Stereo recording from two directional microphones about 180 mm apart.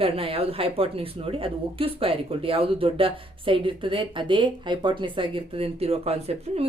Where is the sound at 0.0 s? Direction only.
30° right (ahead or behind).